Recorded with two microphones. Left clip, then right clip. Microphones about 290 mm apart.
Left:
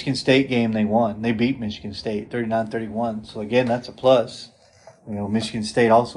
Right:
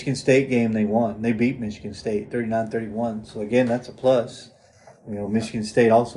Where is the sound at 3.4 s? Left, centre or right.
Left; by 6.1 s centre.